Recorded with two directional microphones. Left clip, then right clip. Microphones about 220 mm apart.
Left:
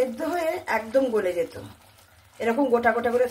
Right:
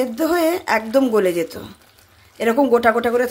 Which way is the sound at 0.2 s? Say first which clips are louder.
Right 8 dB; 45° right (ahead or behind).